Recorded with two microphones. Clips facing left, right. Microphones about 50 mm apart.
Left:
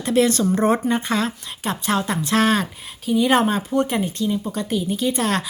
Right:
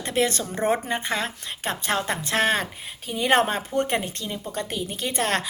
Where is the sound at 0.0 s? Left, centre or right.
Right.